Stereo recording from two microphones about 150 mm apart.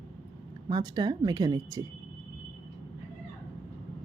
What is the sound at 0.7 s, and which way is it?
A woman's voice, 30° right (ahead or behind).